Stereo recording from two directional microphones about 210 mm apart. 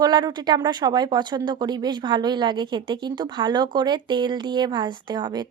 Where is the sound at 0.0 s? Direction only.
20° right (ahead or behind).